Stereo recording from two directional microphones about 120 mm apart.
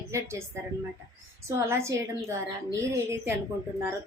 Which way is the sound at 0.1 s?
20° right (ahead or behind).